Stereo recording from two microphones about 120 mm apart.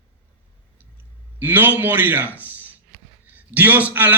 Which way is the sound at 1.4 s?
15° right (ahead or behind).